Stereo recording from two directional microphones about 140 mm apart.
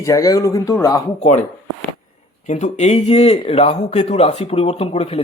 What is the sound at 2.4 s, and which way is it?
Speech, 60° left (ahead or behind).